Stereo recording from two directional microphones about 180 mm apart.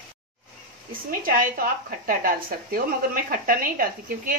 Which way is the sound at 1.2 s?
50° right (ahead or behind).